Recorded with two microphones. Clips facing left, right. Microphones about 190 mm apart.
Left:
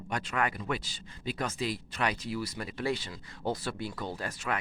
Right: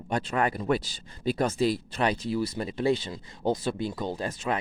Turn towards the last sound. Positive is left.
turn(degrees=-20)  # may be behind; listen again after turning